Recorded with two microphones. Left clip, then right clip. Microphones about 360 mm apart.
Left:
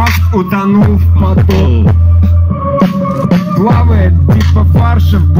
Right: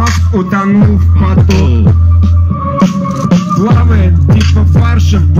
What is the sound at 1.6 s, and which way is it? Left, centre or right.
Music, left.